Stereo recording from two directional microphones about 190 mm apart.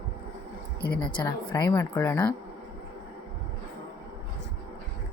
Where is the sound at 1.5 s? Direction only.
20° left (ahead or behind).